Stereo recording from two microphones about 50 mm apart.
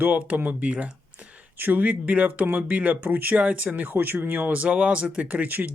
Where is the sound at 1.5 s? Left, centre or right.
Right.